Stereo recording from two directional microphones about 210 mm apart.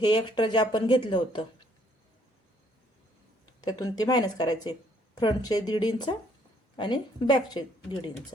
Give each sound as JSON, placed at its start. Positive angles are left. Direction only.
{"t": 0.0, "sound": "speech", "side_deg": 20}
{"t": 3.6, "sound": "speech", "side_deg": 20}